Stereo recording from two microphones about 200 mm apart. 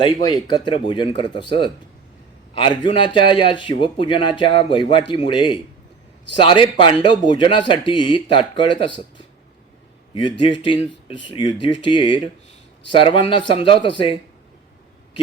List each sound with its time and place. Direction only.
0.0 s a man's voice: 20° left (ahead or behind)
2.6 s a man's voice: 25° left (ahead or behind)